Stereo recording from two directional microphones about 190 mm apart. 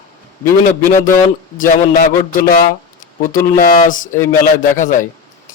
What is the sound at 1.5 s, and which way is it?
A man's voice, 45° left (ahead or behind).